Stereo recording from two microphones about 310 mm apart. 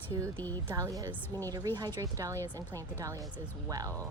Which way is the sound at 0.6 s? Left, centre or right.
Centre.